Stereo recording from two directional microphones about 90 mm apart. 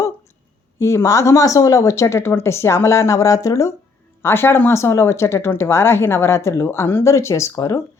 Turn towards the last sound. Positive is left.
turn(degrees=35)  # may be behind; listen again after turning